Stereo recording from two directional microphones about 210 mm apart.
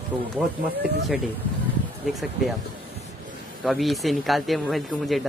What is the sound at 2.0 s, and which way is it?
Speech, centre (ahead or behind).